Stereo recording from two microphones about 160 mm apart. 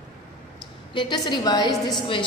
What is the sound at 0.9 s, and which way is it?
A woman's voice, 25° left (ahead or behind).